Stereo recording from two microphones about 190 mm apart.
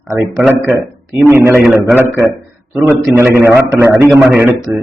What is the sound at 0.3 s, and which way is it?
A man's voice, 10° right (ahead or behind).